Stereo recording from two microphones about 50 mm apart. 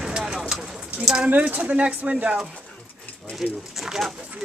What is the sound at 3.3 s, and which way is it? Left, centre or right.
Speech, centre.